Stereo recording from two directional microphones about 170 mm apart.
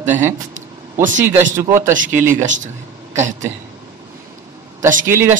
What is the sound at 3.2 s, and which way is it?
Speech, 45° right (ahead or behind).